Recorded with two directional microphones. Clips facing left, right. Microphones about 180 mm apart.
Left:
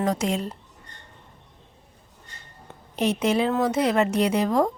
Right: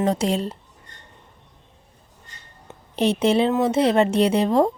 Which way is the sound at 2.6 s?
30° right (ahead or behind).